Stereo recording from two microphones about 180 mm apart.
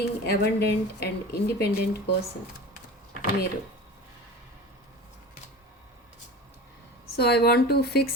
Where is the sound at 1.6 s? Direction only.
65° left (ahead or behind).